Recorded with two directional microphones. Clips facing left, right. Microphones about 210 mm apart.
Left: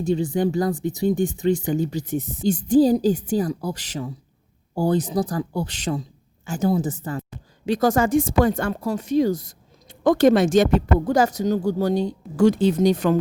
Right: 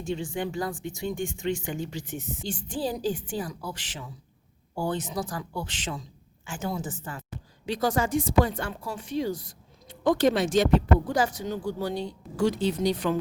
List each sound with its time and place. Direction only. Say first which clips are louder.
0.0 s speech: left 9 dB; 40° left (ahead or behind)